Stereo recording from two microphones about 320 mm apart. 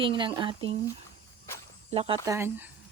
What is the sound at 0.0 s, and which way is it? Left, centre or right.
Speech, centre.